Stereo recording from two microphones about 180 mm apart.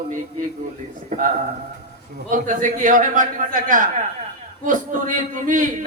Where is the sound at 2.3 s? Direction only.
45° right (ahead or behind).